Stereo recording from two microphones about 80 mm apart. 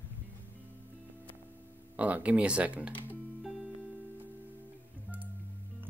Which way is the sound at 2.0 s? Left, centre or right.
Centre.